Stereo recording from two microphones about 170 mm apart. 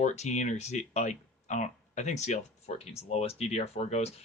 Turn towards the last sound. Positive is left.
turn(degrees=40)  # may be behind; listen again after turning